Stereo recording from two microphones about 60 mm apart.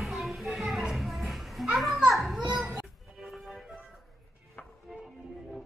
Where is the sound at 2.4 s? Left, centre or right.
Right.